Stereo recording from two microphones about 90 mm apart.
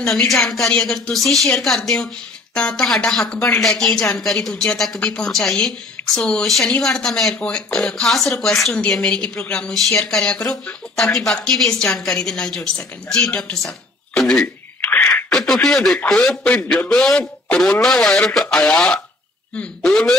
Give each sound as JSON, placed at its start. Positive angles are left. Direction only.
{"t": 0.0, "sound": "a woman's voice", "side_deg": 0}
{"t": 14.8, "sound": "a sound", "side_deg": 20}
{"t": 15.3, "sound": "speech", "side_deg": 0}